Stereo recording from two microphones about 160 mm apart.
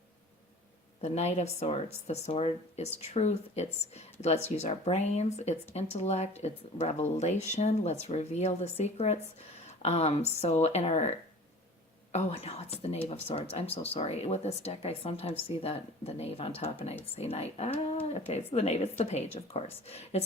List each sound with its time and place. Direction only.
1.0 s speech: 45° left (ahead or behind)
12.1 s speech: 40° left (ahead or behind)